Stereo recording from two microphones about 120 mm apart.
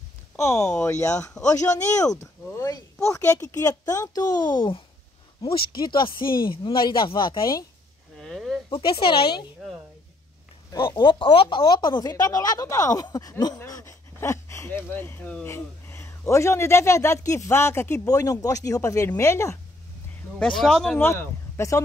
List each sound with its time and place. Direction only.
0.6 s speech: 5° left (ahead or behind)
1.0 s speech: 25° left (ahead or behind)
8.2 s a sound: centre (ahead or behind)
8.6 s speech: 45° left (ahead or behind)
10.7 s speech: 35° left (ahead or behind)
11.4 s speech: 35° left (ahead or behind)
20.3 s speech: 5° left (ahead or behind)
21.0 s speech: 20° left (ahead or behind)